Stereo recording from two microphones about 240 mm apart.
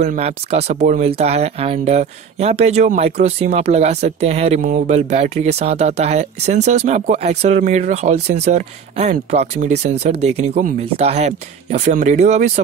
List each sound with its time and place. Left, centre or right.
0.0 s speech: right